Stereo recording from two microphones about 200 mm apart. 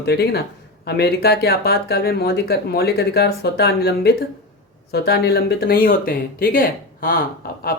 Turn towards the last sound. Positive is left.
turn(degrees=45)  # may be behind; listen again after turning